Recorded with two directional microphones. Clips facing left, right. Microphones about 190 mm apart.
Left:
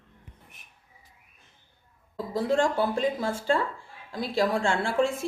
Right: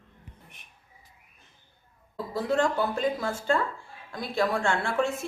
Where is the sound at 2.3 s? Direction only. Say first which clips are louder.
Left 1 dB; 30° left (ahead or behind).